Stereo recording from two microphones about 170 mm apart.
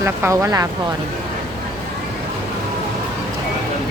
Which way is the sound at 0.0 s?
15° right (ahead or behind).